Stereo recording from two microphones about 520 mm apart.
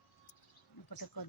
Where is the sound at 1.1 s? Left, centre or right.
Left.